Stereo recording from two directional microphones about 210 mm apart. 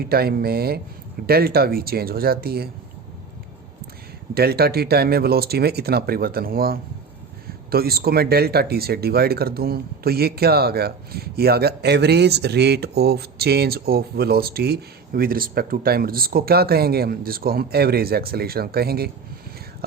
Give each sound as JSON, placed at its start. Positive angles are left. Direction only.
{"t": 0.0, "sound": "speech", "side_deg": -45}
{"t": 4.4, "sound": "speech", "side_deg": -50}